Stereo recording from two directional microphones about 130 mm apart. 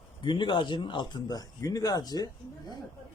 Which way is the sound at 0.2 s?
35° left (ahead or behind).